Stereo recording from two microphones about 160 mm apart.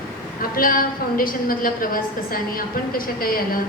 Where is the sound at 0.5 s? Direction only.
60° left (ahead or behind).